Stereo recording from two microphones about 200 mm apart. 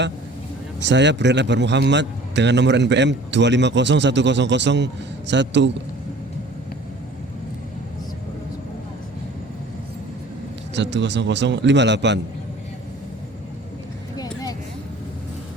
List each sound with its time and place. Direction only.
0.8 s a man's voice: 60° right (ahead or behind)
10.8 s a man's voice: 60° right (ahead or behind)